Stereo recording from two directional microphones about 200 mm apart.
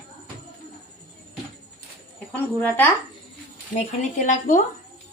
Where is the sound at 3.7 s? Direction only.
35° left (ahead or behind).